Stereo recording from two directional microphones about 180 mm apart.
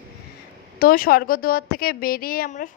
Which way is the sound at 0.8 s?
55° left (ahead or behind).